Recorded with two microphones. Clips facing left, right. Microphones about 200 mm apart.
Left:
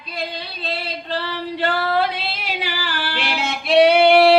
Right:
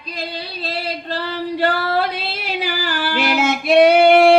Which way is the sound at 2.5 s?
45° right (ahead or behind).